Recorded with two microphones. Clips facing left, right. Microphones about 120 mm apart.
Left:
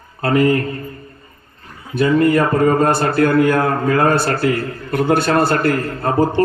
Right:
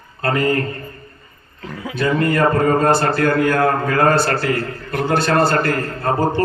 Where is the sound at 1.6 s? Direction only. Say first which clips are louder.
Right 10 dB; 90° right.